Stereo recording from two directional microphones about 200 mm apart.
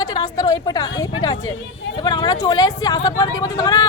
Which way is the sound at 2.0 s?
20° left (ahead or behind).